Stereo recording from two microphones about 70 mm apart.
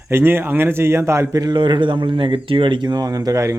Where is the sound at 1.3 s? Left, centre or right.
Right.